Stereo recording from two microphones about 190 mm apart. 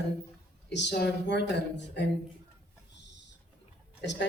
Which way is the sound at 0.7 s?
65° left (ahead or behind).